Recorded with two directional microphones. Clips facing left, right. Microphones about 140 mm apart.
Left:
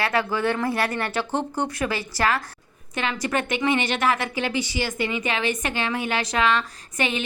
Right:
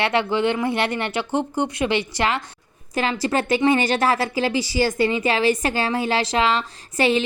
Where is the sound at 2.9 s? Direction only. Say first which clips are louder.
Right 4 dB; 35° right (ahead or behind).